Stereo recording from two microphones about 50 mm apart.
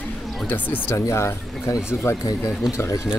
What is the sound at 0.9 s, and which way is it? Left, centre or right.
Speech, left.